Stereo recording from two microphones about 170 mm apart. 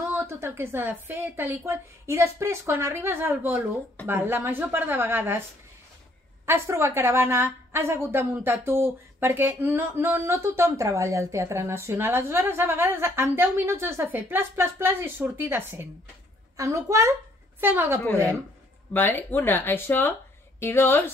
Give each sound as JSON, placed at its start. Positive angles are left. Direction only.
{"t": 0.1, "sound": "speech", "side_deg": -15}
{"t": 6.4, "sound": "a child's voice", "side_deg": -15}
{"t": 18.9, "sound": "speech", "side_deg": 10}